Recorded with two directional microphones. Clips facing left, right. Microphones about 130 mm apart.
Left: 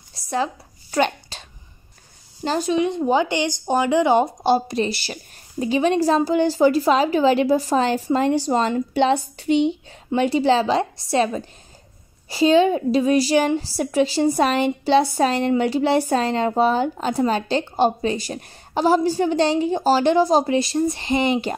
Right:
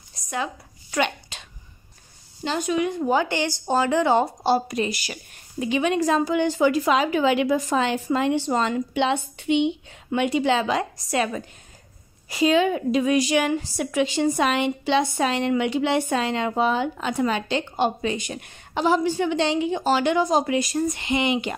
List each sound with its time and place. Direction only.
0.1 s a sound: 30° left (ahead or behind)
2.4 s a woman's voice: 35° left (ahead or behind); by 4.6 s 20° left (ahead or behind)
4.6 s a woman's voice: 30° left (ahead or behind)